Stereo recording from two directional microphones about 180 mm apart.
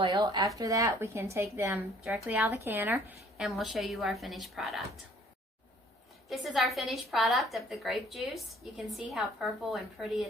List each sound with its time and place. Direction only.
0.0 s speech: 25° right (ahead or behind)
2.0 s a woman's voice: centre (ahead or behind)
6.2 s a woman's voice: centre (ahead or behind)